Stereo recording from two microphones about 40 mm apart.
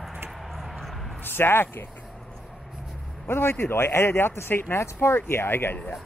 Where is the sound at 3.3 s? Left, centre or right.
Left.